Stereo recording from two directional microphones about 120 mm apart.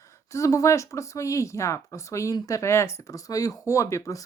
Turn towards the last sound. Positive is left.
turn(degrees=25)  # may be behind; listen again after turning